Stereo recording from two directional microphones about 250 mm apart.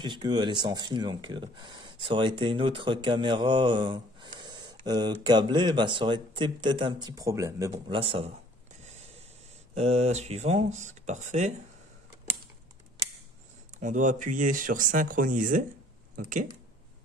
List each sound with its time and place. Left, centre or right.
0.0 s speech: centre
9.8 s speech: right
13.7 s speech: right